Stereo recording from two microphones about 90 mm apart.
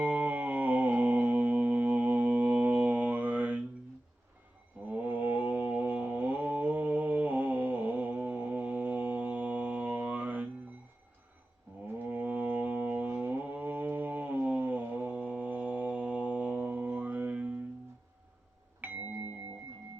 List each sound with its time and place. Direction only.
0.0 s music: 15° right (ahead or behind)
4.9 s mantra: 20° right (ahead or behind)
11.9 s mantra: 20° right (ahead or behind)
18.8 s music: 20° right (ahead or behind)